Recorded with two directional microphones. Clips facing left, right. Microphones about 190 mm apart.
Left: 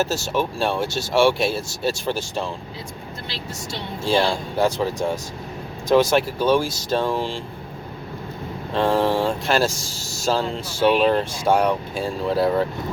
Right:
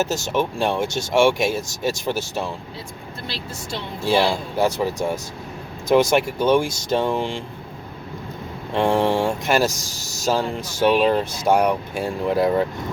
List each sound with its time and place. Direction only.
0.0 s speech: 20° right (ahead or behind)
4.0 s speech: 5° right (ahead or behind)
5.9 s speech: 15° right (ahead or behind)
8.7 s speech: 15° right (ahead or behind)